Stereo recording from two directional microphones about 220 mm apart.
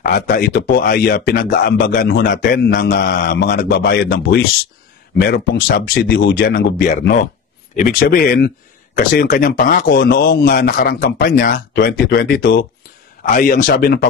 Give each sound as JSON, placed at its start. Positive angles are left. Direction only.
{"t": 0.0, "sound": "speech", "side_deg": 40}